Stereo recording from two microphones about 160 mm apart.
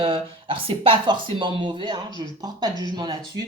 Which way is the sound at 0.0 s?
35° right (ahead or behind).